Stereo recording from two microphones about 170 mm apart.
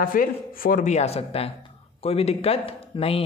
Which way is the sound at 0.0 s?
55° left (ahead or behind).